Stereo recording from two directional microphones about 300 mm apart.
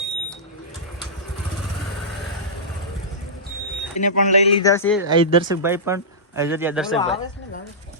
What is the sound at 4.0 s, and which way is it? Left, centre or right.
Speech, left.